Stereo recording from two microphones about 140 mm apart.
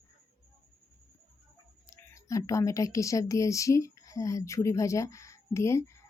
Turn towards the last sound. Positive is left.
turn(degrees=20)  # may be behind; listen again after turning